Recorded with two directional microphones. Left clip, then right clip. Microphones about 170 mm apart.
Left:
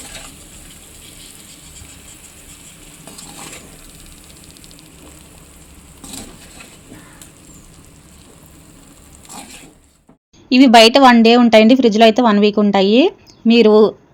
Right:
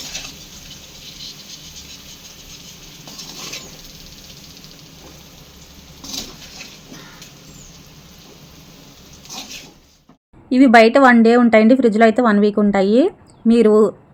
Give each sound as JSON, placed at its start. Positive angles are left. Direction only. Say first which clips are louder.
{"t": 10.5, "sound": "a woman's voice", "louder": "left 2 dB", "side_deg": 20}